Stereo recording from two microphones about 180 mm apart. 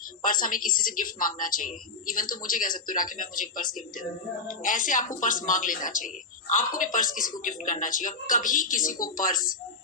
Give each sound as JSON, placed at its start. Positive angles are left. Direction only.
{"t": 0.2, "sound": "a woman's voice", "side_deg": 50}